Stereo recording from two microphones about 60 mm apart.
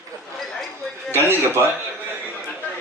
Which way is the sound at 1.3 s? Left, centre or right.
Right.